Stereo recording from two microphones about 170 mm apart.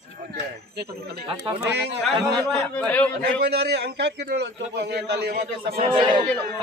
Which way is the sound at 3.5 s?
75° right (ahead or behind).